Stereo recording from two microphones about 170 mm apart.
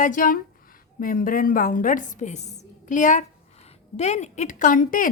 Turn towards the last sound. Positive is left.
turn(degrees=50)  # may be behind; listen again after turning